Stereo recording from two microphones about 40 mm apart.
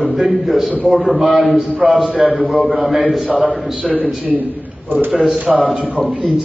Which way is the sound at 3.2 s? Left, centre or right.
Right.